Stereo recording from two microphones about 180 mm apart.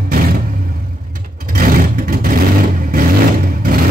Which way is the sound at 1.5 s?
50° right (ahead or behind).